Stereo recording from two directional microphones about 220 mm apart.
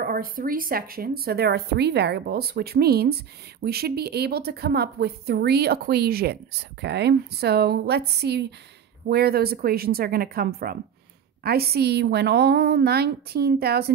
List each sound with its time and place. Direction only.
0.0 s speech: 40° right (ahead or behind)